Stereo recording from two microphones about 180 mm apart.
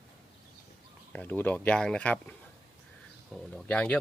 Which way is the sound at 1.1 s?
10° left (ahead or behind).